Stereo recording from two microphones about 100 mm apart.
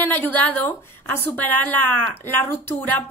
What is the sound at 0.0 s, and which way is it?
A woman's voice, 20° left (ahead or behind).